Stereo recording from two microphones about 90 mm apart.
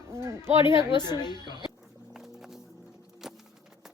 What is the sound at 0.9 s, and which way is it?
Speech, 55° left (ahead or behind).